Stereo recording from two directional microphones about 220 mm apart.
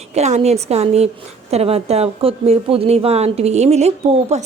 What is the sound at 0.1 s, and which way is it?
A woman's voice, 30° right (ahead or behind).